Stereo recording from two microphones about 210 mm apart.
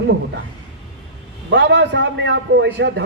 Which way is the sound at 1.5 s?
60° right (ahead or behind).